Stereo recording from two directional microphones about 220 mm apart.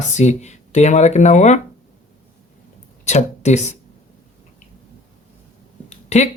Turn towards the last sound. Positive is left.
turn(degrees=30)  # may be behind; listen again after turning